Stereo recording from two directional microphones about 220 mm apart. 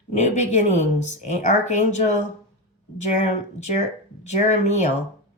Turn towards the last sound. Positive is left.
turn(degrees=30)  # may be behind; listen again after turning